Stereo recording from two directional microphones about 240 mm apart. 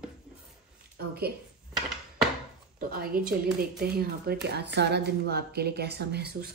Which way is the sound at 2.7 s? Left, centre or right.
Right.